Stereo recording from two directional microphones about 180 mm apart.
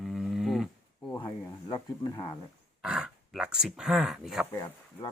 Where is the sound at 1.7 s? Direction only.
25° left (ahead or behind).